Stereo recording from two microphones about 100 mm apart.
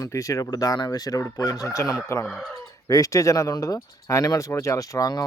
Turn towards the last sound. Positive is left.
turn(degrees=35)  # may be behind; listen again after turning